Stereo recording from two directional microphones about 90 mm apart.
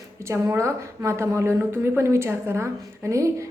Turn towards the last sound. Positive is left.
turn(degrees=-35)  # may be behind; listen again after turning